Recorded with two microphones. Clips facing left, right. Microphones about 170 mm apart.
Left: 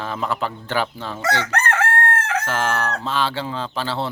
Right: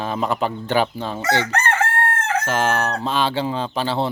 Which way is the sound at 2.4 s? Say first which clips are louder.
Right 2 dB; 20° right (ahead or behind).